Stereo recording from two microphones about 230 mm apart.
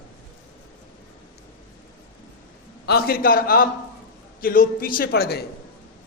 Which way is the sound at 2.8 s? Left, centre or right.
Left.